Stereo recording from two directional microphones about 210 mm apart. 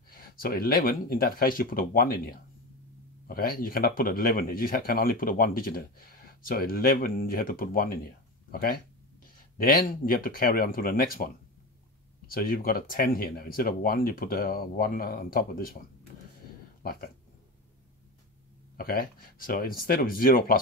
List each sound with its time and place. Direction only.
0.1 s speech: 45° left (ahead or behind)
18.8 s speech: 45° left (ahead or behind)